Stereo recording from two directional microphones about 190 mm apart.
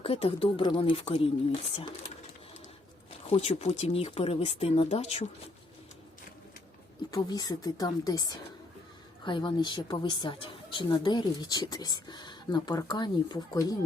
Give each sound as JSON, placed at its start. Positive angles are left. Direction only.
{"t": 0.0, "sound": "a woman's voice", "side_deg": 30}
{"t": 3.2, "sound": "speech", "side_deg": 35}
{"t": 7.1, "sound": "a woman's voice", "side_deg": 20}
{"t": 9.2, "sound": "a woman's voice", "side_deg": 25}